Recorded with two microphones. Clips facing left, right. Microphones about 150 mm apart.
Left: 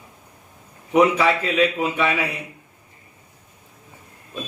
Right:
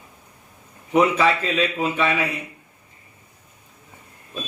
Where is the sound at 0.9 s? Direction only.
15° left (ahead or behind).